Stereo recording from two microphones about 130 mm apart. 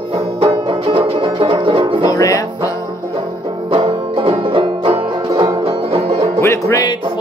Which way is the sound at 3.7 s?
40° right (ahead or behind).